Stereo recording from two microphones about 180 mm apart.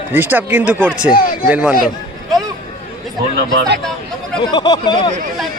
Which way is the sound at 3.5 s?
70° right (ahead or behind).